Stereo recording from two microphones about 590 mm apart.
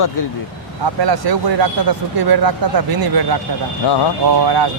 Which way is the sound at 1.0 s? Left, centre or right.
Right.